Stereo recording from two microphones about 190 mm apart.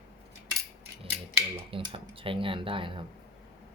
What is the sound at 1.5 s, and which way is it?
Speech, 25° right (ahead or behind).